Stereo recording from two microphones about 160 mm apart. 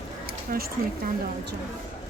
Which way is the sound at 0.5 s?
65° right (ahead or behind).